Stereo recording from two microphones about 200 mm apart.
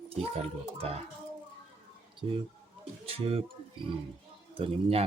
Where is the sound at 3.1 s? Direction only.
30° right (ahead or behind).